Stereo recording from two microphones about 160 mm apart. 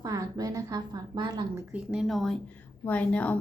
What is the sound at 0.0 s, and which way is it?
A woman's voice, 25° right (ahead or behind).